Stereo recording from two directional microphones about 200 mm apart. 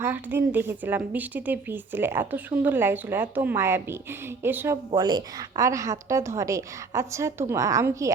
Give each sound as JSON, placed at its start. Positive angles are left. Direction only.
{"t": 0.0, "sound": "a woman's voice", "side_deg": -10}
{"t": 4.9, "sound": "a woman's voice", "side_deg": -20}